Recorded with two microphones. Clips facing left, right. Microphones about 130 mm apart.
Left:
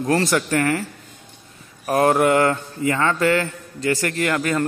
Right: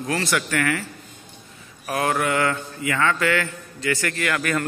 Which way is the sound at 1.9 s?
40° left (ahead or behind).